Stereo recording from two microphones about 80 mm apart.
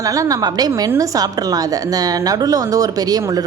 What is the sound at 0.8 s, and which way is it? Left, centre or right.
A woman's voice, right.